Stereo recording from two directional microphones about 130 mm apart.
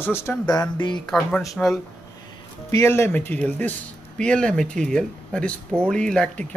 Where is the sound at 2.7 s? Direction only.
20° left (ahead or behind).